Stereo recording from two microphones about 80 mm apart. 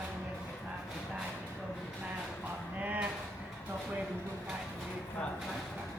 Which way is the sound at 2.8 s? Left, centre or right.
Centre.